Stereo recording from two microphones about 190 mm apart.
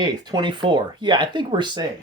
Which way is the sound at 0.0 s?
20° right (ahead or behind).